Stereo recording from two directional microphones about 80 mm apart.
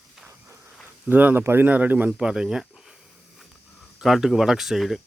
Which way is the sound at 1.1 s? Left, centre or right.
Right.